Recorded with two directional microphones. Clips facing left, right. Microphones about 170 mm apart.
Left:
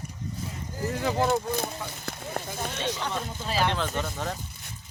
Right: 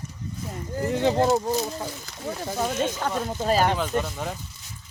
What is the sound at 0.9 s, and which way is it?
Speech, 25° right (ahead or behind).